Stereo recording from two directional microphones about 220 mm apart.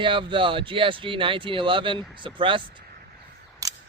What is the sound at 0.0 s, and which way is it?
Speech, 20° right (ahead or behind).